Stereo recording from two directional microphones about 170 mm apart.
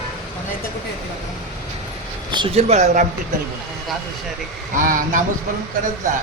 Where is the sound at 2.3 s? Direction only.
30° right (ahead or behind).